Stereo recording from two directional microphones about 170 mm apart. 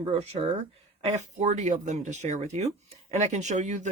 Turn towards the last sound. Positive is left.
turn(degrees=-45)  # may be behind; listen again after turning